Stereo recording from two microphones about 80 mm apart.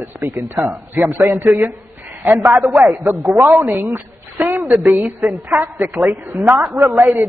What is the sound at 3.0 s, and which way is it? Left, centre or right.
Speech, right.